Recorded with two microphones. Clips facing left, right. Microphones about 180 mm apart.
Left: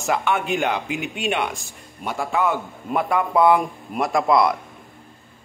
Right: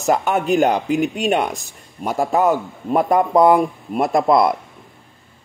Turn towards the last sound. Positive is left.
turn(degrees=-40)  # may be behind; listen again after turning